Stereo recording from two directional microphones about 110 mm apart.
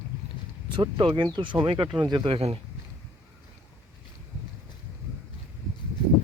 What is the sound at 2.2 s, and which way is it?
Speech, 65° right (ahead or behind).